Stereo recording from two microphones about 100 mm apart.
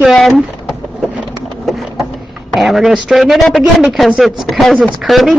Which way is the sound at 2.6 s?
Centre (ahead or behind).